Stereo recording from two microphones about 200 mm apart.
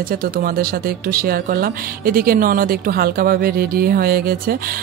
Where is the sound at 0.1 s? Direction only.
45° right (ahead or behind).